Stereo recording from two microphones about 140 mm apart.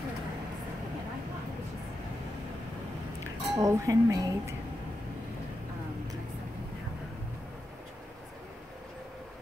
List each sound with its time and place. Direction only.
3.5 s speech: 25° right (ahead or behind)